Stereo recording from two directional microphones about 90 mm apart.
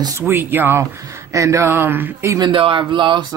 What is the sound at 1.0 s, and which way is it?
Speech, 35° right (ahead or behind).